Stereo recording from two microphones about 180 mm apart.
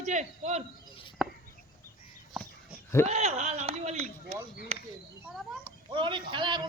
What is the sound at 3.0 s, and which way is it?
A man's voice, 35° right (ahead or behind).